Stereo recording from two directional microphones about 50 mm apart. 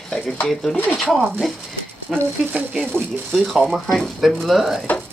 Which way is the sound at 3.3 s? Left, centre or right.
Centre.